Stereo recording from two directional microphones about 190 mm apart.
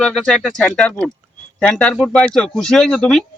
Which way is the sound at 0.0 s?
Centre (ahead or behind).